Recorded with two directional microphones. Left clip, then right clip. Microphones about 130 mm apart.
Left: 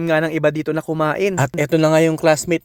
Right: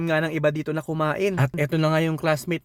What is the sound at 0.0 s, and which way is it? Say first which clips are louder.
Speech: left 6 dB; 60° left (ahead or behind).